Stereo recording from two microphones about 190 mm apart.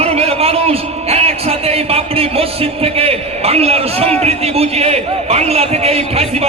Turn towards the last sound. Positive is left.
turn(degrees=-35)  # may be behind; listen again after turning